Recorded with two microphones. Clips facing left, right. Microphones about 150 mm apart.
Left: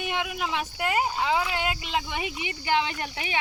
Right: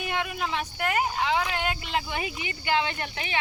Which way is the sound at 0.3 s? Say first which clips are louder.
Even; 15° left (ahead or behind).